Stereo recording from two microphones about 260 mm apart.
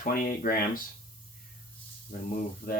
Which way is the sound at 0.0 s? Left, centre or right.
Left.